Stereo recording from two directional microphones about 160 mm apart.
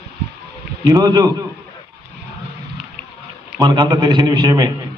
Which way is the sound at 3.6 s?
25° right (ahead or behind).